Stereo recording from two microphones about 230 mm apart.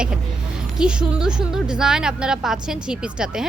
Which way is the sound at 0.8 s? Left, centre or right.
Centre.